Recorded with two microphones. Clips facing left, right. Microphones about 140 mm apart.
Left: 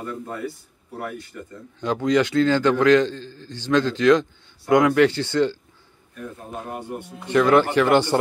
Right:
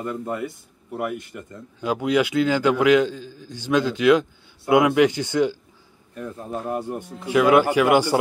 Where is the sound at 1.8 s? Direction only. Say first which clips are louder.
Left 1 dB; 10° right (ahead or behind).